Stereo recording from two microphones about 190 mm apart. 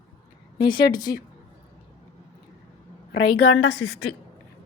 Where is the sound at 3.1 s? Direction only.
60° left (ahead or behind).